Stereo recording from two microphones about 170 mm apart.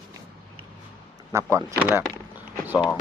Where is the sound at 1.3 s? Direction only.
15° right (ahead or behind).